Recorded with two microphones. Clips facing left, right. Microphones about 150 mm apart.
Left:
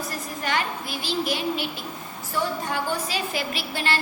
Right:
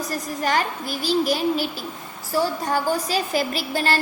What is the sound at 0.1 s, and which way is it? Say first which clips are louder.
A woman's voice: right 6 dB; 40° right (ahead or behind).